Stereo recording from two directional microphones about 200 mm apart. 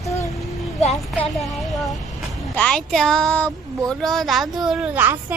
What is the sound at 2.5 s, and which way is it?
Speech, 5° left (ahead or behind).